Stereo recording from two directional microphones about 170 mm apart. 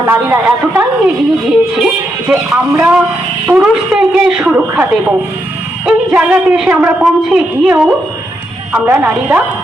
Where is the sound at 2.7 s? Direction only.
10° right (ahead or behind).